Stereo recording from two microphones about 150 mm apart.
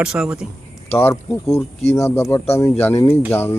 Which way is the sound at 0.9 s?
15° left (ahead or behind).